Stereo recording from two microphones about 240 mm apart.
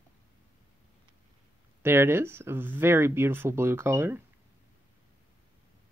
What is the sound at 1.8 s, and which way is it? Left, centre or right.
Speech, centre.